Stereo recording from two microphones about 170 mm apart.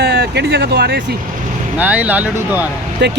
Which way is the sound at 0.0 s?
65° right (ahead or behind).